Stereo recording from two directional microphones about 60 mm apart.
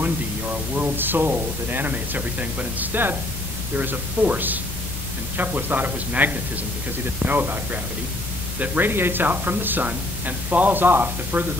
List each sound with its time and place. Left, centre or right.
0.0 s speech: right